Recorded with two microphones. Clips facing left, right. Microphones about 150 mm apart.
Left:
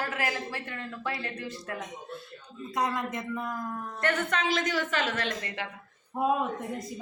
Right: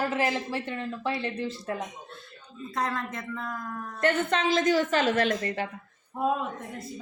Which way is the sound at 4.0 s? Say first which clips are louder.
Right 4 dB; 30° right (ahead or behind).